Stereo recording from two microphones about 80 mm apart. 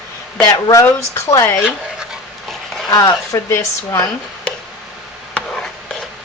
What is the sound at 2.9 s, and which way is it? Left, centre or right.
A woman's voice, left.